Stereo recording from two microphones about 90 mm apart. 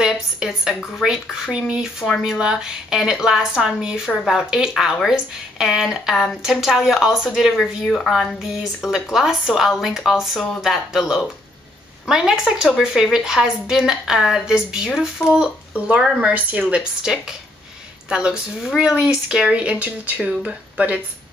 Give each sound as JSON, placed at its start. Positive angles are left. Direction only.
{"t": 0.0, "sound": "a woman's voice", "side_deg": -5}